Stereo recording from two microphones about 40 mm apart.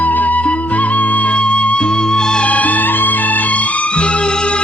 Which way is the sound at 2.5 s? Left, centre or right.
Left.